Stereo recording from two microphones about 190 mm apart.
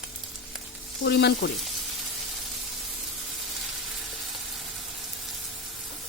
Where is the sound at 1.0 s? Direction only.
65° left (ahead or behind).